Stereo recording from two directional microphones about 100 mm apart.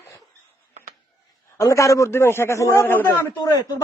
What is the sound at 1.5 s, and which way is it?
A man's voice, 30° left (ahead or behind).